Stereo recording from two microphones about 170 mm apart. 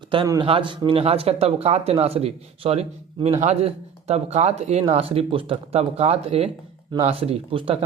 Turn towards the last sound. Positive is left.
turn(degrees=-30)  # may be behind; listen again after turning